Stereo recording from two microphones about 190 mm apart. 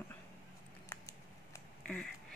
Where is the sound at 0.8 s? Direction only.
15° left (ahead or behind).